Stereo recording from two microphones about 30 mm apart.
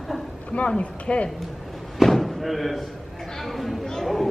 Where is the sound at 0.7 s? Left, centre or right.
Left.